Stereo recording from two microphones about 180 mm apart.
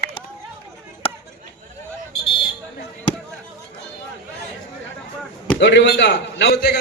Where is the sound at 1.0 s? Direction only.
30° left (ahead or behind).